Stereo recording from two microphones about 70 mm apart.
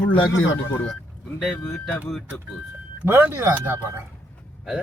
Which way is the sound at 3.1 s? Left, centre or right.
Right.